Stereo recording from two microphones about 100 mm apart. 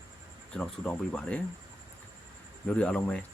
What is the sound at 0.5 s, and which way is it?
Speech, 10° left (ahead or behind).